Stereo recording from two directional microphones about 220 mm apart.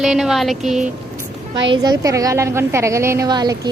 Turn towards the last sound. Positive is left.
turn(degrees=-20)  # may be behind; listen again after turning